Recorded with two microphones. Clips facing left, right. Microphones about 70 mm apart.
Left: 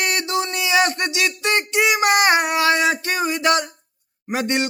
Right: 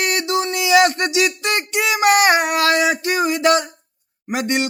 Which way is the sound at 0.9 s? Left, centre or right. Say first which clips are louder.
Right 4 dB; right.